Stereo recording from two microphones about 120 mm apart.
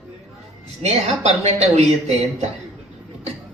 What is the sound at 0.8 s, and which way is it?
Speech, 65° right (ahead or behind).